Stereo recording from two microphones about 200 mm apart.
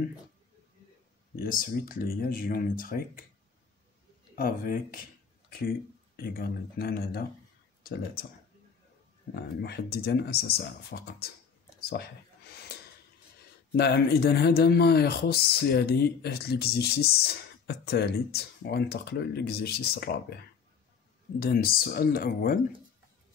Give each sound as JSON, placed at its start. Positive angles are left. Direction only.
{"t": 1.3, "sound": "speech", "side_deg": 45}
{"t": 4.4, "sound": "speech", "side_deg": 45}
{"t": 6.1, "sound": "speech", "side_deg": 50}
{"t": 9.3, "sound": "speech", "side_deg": 55}
{"t": 12.7, "sound": "a sound", "side_deg": 55}
{"t": 13.7, "sound": "speech", "side_deg": 55}
{"t": 21.4, "sound": "speech", "side_deg": 50}